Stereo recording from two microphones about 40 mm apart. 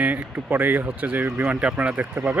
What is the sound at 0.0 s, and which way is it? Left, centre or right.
Speech, right.